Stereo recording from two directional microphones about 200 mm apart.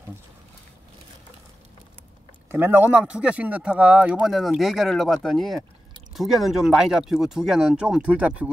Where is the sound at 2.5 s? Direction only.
10° right (ahead or behind).